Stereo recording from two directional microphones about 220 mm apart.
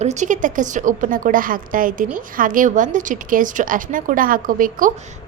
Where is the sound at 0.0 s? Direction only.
30° right (ahead or behind).